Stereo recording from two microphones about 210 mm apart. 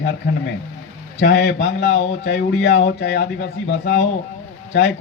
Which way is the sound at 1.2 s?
55° left (ahead or behind).